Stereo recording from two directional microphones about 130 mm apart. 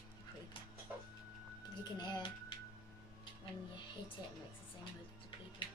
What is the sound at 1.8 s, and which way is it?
Speech, 35° left (ahead or behind).